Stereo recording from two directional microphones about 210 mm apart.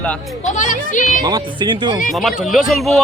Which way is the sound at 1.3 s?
20° right (ahead or behind).